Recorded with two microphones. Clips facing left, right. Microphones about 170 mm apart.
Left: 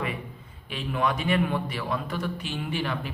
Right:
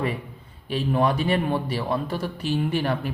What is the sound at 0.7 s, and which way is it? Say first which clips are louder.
A man's voice: right 5 dB; 35° right (ahead or behind).